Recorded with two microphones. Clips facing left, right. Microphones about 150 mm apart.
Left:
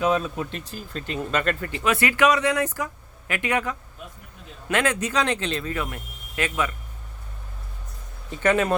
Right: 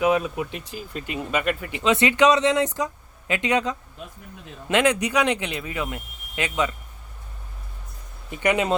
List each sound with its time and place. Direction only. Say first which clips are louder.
0.0 s speech: right 2 dB; 15° right (ahead or behind)
8.3 s speech: left 1 dB; 15° right (ahead or behind)